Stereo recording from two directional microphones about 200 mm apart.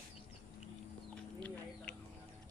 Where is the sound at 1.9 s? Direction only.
5° left (ahead or behind).